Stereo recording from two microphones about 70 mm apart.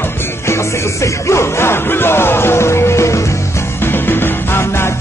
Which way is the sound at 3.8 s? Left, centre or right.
Left.